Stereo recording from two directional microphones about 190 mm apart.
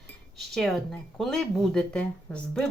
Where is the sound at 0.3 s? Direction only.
Centre (ahead or behind).